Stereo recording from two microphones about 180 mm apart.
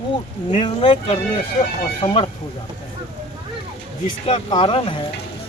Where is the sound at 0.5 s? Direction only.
30° left (ahead or behind).